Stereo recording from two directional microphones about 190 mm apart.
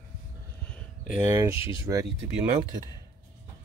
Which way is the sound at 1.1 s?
10° right (ahead or behind).